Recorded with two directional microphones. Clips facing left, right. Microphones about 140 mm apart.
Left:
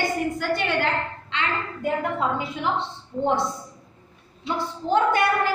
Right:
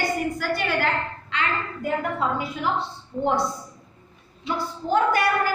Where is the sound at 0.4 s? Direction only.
20° left (ahead or behind).